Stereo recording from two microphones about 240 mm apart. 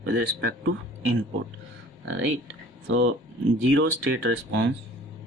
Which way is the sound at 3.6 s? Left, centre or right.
Right.